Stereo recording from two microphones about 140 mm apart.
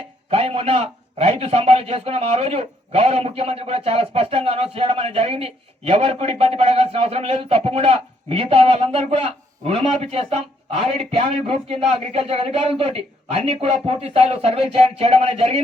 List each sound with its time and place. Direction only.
0.3 s a man's voice: 45° right (ahead or behind)